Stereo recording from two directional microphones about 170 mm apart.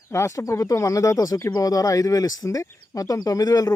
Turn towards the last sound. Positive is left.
turn(degrees=20)  # may be behind; listen again after turning